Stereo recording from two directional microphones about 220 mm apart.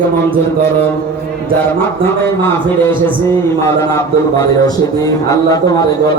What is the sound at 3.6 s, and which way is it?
A man's voice, 15° left (ahead or behind).